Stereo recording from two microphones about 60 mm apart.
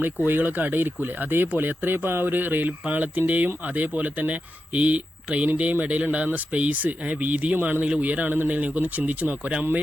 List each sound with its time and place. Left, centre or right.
0.3 s speech: right